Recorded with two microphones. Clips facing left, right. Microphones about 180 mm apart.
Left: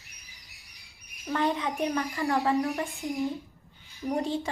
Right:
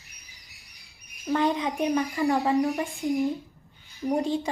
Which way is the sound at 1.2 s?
15° right (ahead or behind).